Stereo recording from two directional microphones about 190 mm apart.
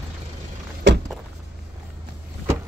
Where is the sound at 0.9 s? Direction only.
70° right (ahead or behind).